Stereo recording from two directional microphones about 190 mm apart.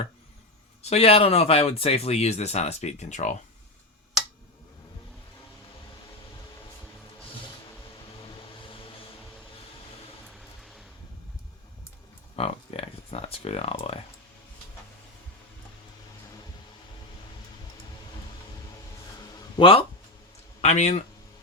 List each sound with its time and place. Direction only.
0.8 s speech: 35° left (ahead or behind)
8.2 s vehicle: 25° left (ahead or behind)
10.2 s a sound: centre (ahead or behind)
12.4 s speech: 30° left (ahead or behind)
19.5 s a man's voice: 30° left (ahead or behind)